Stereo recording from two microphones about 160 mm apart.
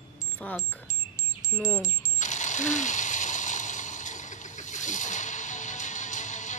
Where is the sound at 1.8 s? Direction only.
50° left (ahead or behind).